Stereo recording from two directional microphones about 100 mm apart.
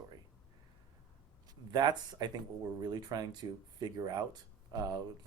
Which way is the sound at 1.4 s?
45° right (ahead or behind).